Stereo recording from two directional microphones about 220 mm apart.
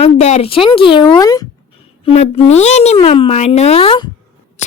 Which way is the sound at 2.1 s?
25° left (ahead or behind).